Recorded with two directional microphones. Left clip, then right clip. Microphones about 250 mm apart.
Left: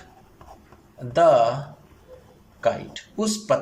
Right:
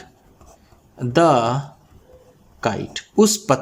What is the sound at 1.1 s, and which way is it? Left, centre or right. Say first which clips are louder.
Speech: right 1 dB; right.